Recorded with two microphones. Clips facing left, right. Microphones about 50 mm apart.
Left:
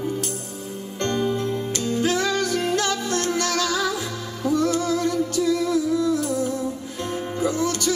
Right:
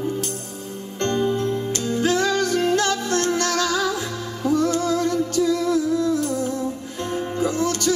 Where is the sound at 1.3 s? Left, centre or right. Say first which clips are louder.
Right 2 dB; centre.